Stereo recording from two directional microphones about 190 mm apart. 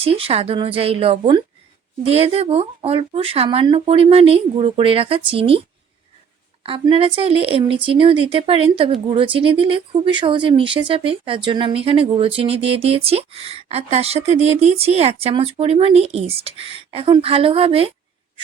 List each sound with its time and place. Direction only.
0.0 s speech: 30° right (ahead or behind)